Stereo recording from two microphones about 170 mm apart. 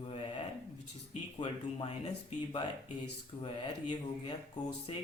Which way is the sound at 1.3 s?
35° left (ahead or behind).